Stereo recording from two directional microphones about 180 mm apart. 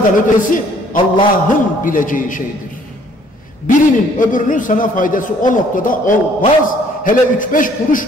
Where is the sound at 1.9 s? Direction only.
50° left (ahead or behind).